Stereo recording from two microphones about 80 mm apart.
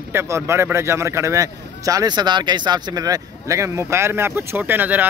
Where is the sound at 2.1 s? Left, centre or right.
Right.